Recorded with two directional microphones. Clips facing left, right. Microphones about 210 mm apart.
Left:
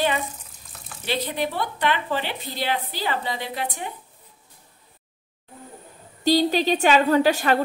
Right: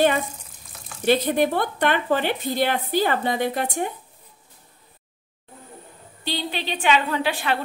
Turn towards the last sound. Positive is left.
turn(degrees=45)  # may be behind; listen again after turning